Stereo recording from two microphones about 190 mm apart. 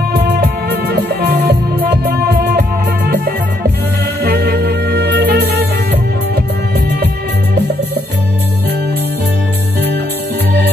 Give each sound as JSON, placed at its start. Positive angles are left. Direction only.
{"t": 0.1, "sound": "music", "side_deg": -55}
{"t": 4.2, "sound": "music", "side_deg": -55}